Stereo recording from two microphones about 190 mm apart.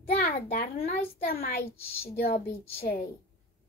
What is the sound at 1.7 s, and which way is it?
Speech, 10° left (ahead or behind).